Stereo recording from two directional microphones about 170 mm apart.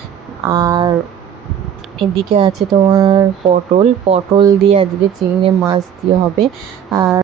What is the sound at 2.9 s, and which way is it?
Speech, 25° right (ahead or behind).